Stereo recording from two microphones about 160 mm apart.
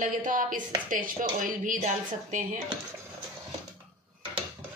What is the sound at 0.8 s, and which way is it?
Speech, 55° right (ahead or behind).